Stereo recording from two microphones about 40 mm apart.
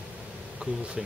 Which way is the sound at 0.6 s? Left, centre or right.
Right.